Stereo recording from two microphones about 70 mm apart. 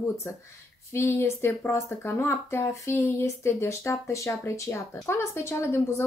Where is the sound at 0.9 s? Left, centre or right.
Left.